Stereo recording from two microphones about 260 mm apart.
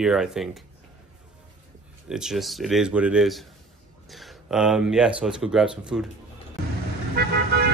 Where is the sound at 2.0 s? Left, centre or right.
Centre.